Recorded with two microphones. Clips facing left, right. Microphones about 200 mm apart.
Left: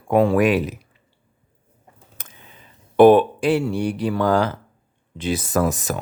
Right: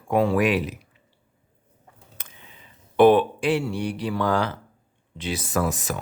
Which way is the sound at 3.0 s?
45° left (ahead or behind).